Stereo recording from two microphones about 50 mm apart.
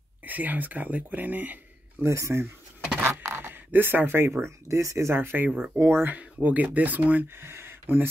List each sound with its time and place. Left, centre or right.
0.2 s speech: right
2.0 s speech: right
3.0 s a sound: right
3.3 s speech: right
4.6 s speech: right
5.2 s speech: right
6.0 s speech: right
7.3 s a sound: right